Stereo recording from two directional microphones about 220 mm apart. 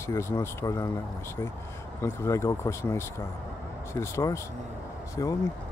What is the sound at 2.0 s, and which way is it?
Speech, 10° left (ahead or behind).